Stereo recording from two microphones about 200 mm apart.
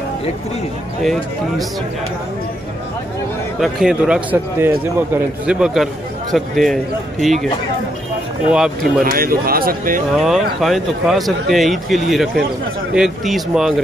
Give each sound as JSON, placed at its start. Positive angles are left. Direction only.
{"t": 1.0, "sound": "a man's voice", "side_deg": 0}
{"t": 3.5, "sound": "a man's voice", "side_deg": 0}
{"t": 8.5, "sound": "a man's voice", "side_deg": -5}
{"t": 9.0, "sound": "speech", "side_deg": -45}
{"t": 10.1, "sound": "a man's voice", "side_deg": 0}